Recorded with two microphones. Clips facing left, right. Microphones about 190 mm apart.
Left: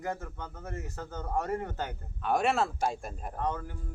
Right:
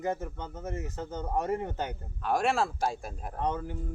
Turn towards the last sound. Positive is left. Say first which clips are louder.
# right 2 dB
turn(degrees=-20)  # may be behind; listen again after turning